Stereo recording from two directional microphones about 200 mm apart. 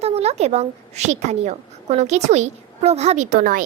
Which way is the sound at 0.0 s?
30° right (ahead or behind).